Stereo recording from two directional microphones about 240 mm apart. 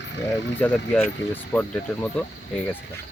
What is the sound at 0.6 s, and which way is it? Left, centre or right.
Speech, centre.